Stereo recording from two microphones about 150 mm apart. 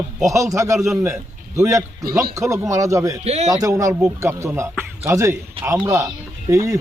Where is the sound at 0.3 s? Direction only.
20° right (ahead or behind).